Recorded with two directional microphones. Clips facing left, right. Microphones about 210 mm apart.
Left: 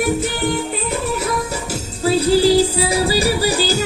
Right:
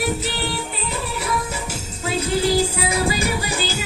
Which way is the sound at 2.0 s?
30° left (ahead or behind).